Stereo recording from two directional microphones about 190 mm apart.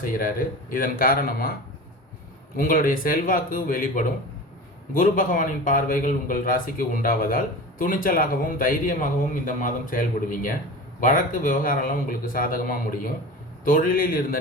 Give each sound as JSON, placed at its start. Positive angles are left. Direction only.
{"t": 0.0, "sound": "a man's voice", "side_deg": 45}
{"t": 2.6, "sound": "a man's voice", "side_deg": 45}